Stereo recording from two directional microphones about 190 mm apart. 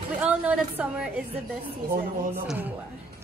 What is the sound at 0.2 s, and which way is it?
Speech, 5° right (ahead or behind).